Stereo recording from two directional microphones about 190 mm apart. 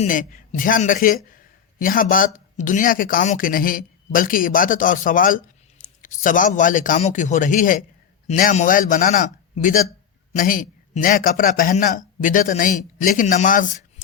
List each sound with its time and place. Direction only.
0.0 s speech: 45° left (ahead or behind)